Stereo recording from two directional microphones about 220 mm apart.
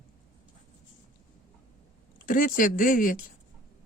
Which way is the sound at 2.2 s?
40° left (ahead or behind).